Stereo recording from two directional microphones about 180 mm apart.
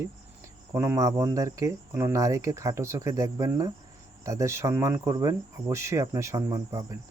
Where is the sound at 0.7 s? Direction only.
15° right (ahead or behind).